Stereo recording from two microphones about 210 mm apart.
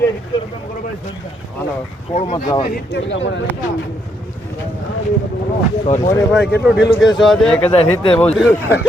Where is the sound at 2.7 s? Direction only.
45° left (ahead or behind).